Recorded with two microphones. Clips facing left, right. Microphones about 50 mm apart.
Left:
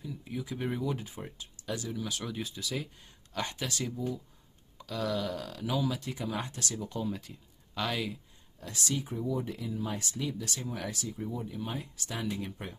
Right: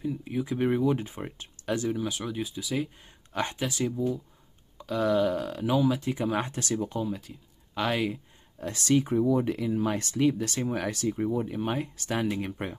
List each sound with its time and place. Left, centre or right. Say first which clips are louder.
0.0 s speech: right 8 dB; right
2.0 s speech: right 5 dB; centre
3.3 s speech: right 5 dB; right
3.6 s speech: right 6 dB; centre; by 6.7 s right
7.0 s speech: right 4 dB; centre
7.8 s speech: right 6 dB; right
8.9 s speech: right 11 dB; right